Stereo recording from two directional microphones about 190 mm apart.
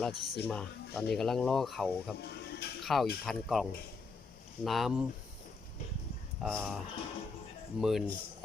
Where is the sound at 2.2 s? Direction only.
60° left (ahead or behind).